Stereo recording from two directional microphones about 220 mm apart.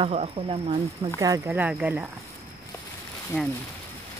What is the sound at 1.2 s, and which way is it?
Speech, 10° right (ahead or behind).